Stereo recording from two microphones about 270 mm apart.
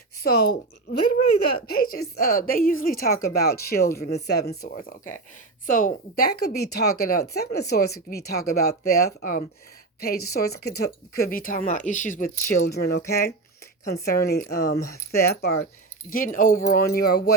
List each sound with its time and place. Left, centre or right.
0.2 s speech: left